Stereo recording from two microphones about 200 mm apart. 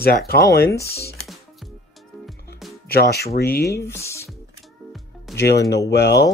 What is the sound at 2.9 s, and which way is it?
Speech, 50° left (ahead or behind).